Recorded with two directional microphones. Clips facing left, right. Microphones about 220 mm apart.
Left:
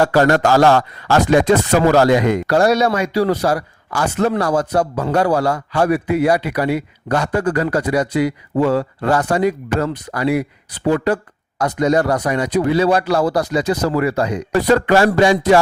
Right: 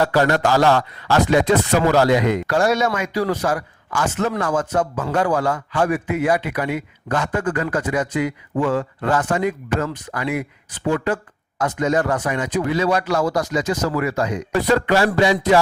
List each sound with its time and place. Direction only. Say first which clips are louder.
0.0 s speech: left 4 dB; 45° left (ahead or behind)